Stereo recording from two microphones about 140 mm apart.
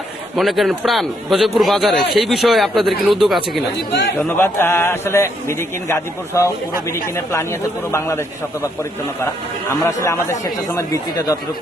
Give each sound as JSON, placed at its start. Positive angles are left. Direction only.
{"t": 0.3, "sound": "a man's voice", "side_deg": 0}
{"t": 4.4, "sound": "a man's voice", "side_deg": 15}